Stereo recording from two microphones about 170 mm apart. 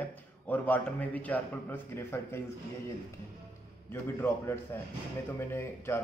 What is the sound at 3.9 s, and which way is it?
A man's voice, 15° left (ahead or behind).